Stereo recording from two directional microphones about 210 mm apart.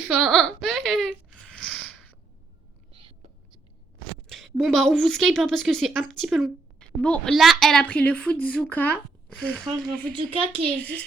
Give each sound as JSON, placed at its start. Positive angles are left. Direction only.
{"t": 0.2, "sound": "a sound", "side_deg": 0}
{"t": 4.3, "sound": "a woman's voice", "side_deg": 0}
{"t": 10.2, "sound": "a woman's voice", "side_deg": -25}
{"t": 10.8, "sound": "a woman's voice", "side_deg": 5}